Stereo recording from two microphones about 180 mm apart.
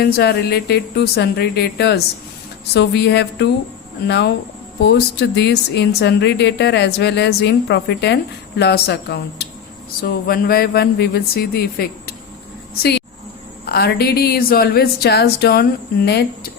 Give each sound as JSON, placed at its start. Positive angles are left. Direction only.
{"t": 0.0, "sound": "speech", "side_deg": 65}
{"t": 10.0, "sound": "speech", "side_deg": 55}
{"t": 13.7, "sound": "speech", "side_deg": 60}